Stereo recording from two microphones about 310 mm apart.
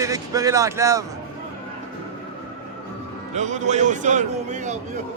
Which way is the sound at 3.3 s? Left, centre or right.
Right.